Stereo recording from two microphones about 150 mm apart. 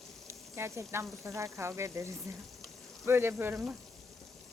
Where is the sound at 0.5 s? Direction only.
15° right (ahead or behind).